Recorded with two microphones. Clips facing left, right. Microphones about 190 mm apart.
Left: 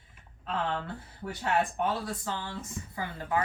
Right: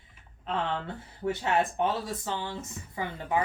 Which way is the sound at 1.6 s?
25° right (ahead or behind).